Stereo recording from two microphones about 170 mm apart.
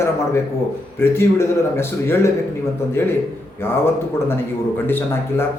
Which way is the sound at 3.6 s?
15° left (ahead or behind).